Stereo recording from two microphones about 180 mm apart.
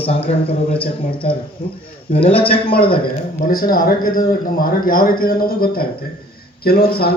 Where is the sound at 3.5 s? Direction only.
50° left (ahead or behind).